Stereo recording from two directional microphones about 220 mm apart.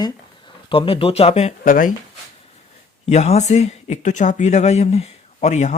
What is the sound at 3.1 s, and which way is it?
Speech, 30° left (ahead or behind).